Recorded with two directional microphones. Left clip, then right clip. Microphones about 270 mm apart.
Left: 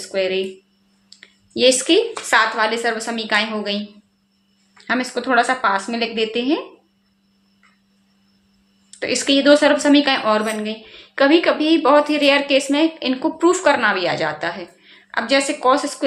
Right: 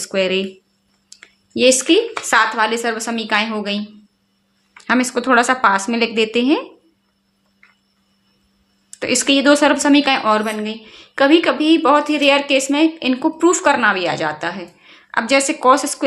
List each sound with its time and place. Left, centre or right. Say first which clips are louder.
0.0 s speech: right 2 dB; right
1.2 s a sound: right 1 dB; right
2.2 s a woman's voice: right 1 dB; centre
4.9 s a woman's voice: right 4 dB; right
8.9 s a woman's voice: right 2 dB; right